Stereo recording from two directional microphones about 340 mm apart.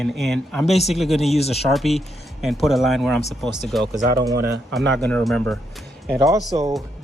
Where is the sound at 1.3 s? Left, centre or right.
Centre.